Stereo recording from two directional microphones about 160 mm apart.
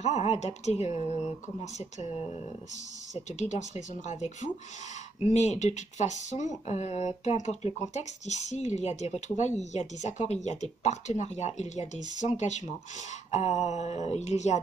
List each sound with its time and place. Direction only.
0.0 s speech: 40° left (ahead or behind)